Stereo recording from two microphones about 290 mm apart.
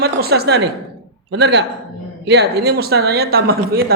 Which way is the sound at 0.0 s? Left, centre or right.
Right.